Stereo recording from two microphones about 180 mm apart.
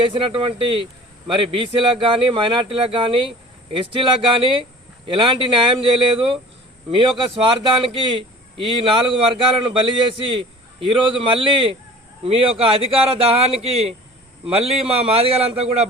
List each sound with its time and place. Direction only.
0.0 s speech: 30° right (ahead or behind)